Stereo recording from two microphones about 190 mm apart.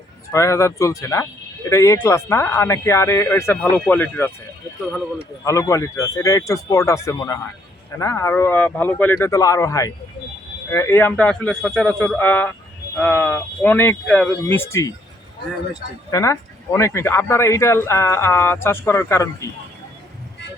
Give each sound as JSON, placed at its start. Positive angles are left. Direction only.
{"t": 0.3, "sound": "speech", "side_deg": 15}
{"t": 5.5, "sound": "speech", "side_deg": 15}
{"t": 16.0, "sound": "speech", "side_deg": 15}